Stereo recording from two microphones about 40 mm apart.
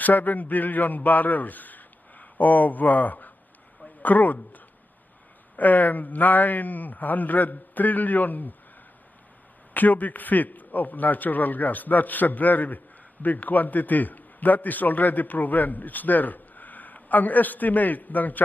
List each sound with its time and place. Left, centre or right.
0.0 s speech: left
5.6 s a man's voice: left
9.8 s a man's voice: left